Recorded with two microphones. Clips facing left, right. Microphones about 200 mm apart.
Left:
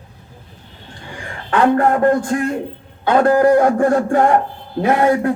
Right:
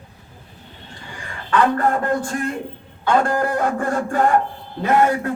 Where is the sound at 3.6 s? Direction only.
45° left (ahead or behind).